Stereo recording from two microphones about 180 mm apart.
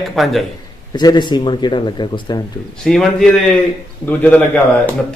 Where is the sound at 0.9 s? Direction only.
20° left (ahead or behind).